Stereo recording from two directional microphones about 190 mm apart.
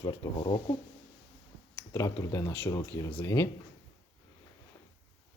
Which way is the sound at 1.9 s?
15° left (ahead or behind).